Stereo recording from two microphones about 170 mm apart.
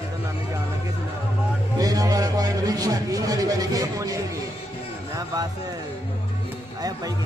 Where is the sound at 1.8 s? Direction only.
20° right (ahead or behind).